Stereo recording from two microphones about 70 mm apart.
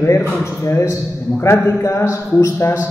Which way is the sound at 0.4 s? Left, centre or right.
Left.